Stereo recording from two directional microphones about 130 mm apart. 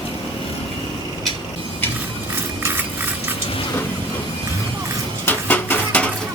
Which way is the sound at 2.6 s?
15° right (ahead or behind).